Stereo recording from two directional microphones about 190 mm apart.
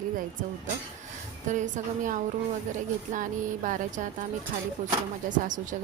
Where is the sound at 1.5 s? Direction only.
40° right (ahead or behind).